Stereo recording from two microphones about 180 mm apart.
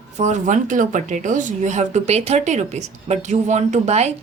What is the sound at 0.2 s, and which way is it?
A woman's voice, 40° right (ahead or behind).